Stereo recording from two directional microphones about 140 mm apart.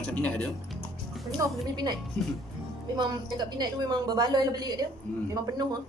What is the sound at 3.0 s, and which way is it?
A woman's voice, 30° right (ahead or behind).